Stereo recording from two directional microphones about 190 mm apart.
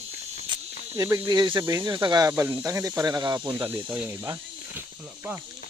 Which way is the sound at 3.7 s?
5° right (ahead or behind).